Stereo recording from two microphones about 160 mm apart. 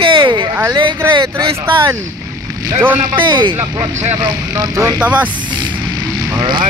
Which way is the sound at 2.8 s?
10° right (ahead or behind).